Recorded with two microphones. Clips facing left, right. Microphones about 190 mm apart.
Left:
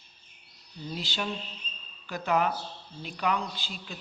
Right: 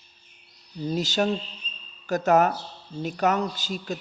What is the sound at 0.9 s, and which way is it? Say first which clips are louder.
Speech: right 10 dB; 45° right (ahead or behind).